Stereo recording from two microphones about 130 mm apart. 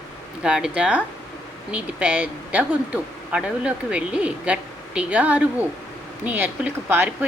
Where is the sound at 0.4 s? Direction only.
5° right (ahead or behind).